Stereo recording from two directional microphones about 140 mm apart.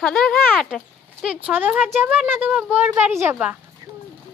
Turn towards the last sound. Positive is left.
turn(degrees=-15)  # may be behind; listen again after turning